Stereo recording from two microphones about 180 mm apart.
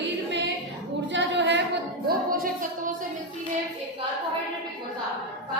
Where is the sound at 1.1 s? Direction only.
80° right.